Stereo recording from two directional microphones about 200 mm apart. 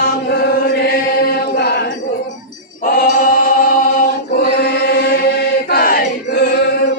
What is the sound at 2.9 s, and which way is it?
Choir, 45° left (ahead or behind).